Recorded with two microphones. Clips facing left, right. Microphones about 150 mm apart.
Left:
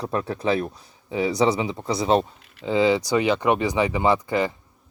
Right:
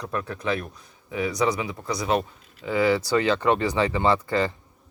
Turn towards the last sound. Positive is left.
turn(degrees=15)  # may be behind; listen again after turning